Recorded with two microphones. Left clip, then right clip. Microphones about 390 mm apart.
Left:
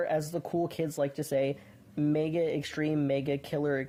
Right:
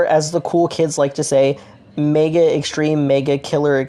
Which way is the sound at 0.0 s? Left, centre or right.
Left.